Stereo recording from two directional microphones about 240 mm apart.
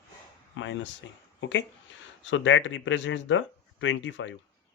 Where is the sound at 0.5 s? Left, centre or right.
Left.